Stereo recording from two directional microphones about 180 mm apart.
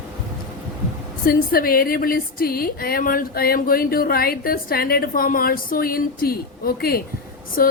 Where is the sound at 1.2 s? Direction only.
55° left (ahead or behind).